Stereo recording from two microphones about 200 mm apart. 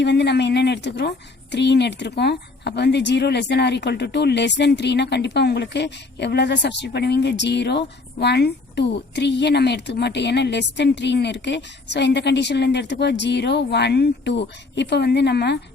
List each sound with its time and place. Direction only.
0.0 s a woman's voice: 60° left (ahead or behind)